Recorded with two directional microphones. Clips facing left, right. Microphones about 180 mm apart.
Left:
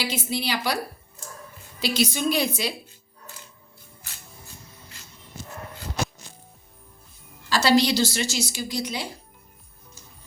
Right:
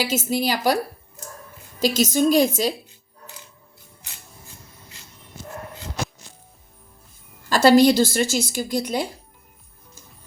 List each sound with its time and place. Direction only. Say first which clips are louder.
0.0 s speech: right 6 dB; 45° right (ahead or behind)
1.8 s speech: right 5 dB; 45° right (ahead or behind)
7.5 s speech: right 6 dB; 50° right (ahead or behind)